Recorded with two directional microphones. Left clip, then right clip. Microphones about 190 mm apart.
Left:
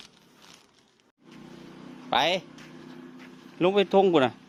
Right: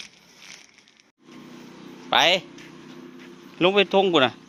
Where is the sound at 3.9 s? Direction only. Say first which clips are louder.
Right 2 dB; 15° left (ahead or behind).